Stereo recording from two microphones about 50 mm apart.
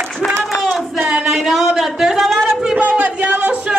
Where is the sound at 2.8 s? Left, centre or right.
Right.